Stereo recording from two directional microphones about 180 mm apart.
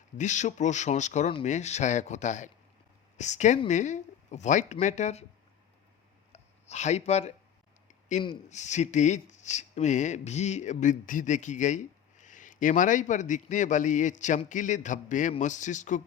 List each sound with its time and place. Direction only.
0.2 s speech: 40° left (ahead or behind)
6.3 s speech: 40° left (ahead or behind)
8.4 s speech: 40° left (ahead or behind)